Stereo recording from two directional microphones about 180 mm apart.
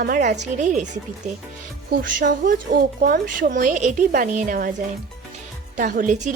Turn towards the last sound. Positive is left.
turn(degrees=-45)  # may be behind; listen again after turning